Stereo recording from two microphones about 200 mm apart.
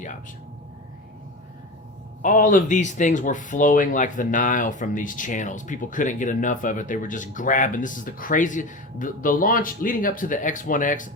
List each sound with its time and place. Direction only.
2.2 s speech: 40° left (ahead or behind)